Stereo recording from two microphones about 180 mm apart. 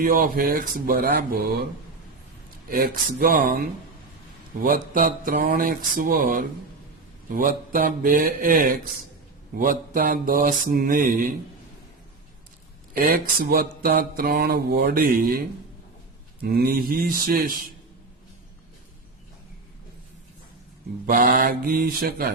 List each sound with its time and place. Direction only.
0.0 s mantra: 50° right (ahead or behind)
2.6 s mantra: 55° right (ahead or behind)
12.9 s mantra: 55° right (ahead or behind)
21.1 s mantra: 50° right (ahead or behind)